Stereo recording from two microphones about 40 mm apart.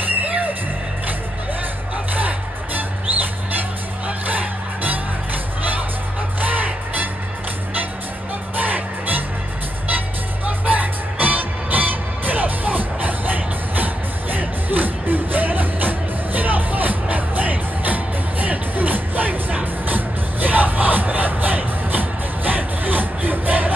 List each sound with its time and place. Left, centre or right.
0.1 s music: right
2.1 s music: right
8.5 s music: right